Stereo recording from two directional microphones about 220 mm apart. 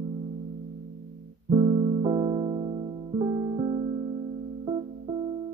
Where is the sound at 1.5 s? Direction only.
20° right (ahead or behind).